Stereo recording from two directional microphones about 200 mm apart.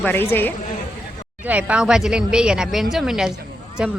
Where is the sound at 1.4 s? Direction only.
5° right (ahead or behind).